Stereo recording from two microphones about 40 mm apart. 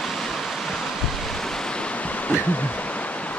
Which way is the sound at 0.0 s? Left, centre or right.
Centre.